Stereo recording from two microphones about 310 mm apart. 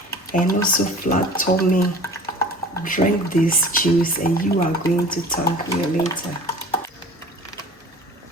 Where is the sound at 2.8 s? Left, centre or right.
Left.